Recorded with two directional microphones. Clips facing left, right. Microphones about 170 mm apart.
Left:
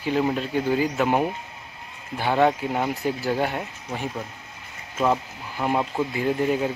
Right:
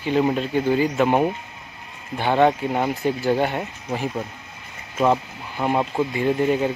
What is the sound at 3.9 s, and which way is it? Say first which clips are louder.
Speech: right 5 dB; 10° right (ahead or behind).